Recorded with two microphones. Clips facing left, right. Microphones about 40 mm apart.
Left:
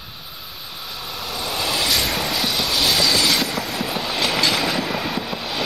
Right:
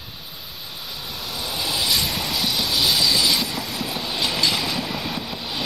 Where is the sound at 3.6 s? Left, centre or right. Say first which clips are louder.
Left 3 dB; left.